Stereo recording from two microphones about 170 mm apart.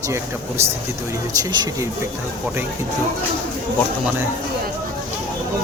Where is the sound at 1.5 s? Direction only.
25° right (ahead or behind).